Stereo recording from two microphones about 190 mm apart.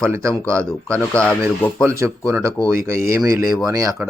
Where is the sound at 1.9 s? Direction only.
15° right (ahead or behind).